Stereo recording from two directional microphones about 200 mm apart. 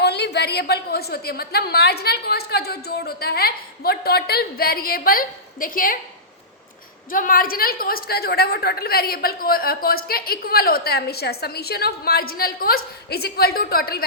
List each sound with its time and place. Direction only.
0.0 s a woman's voice: 55° left (ahead or behind)
7.1 s a woman's voice: 45° left (ahead or behind)